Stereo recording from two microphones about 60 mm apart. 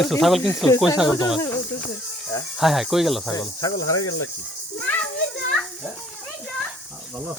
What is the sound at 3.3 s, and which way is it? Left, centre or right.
Cricket, left.